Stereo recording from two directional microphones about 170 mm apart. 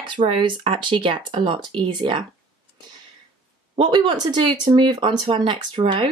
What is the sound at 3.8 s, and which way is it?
Speech, 25° right (ahead or behind).